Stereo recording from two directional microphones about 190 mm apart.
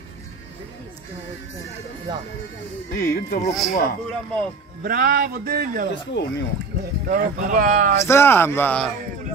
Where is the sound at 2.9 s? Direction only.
55° left (ahead or behind).